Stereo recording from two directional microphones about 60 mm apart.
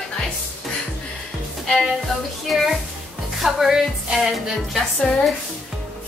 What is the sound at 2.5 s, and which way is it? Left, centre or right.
Music, centre.